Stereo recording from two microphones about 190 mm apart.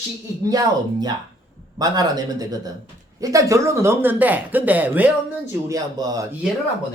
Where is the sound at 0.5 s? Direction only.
20° right (ahead or behind).